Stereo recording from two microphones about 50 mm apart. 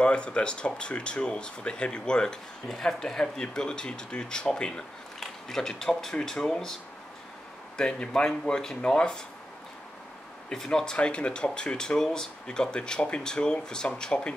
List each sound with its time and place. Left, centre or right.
0.0 s speech: left
10.5 s speech: centre